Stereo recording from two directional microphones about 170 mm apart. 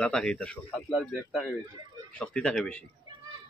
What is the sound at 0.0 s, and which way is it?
Speech, 5° left (ahead or behind).